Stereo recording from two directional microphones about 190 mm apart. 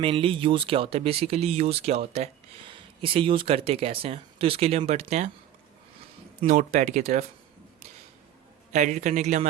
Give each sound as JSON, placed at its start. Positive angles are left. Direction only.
{"t": 0.0, "sound": "speech", "side_deg": -30}
{"t": 6.4, "sound": "speech", "side_deg": -40}
{"t": 8.7, "sound": "speech", "side_deg": -40}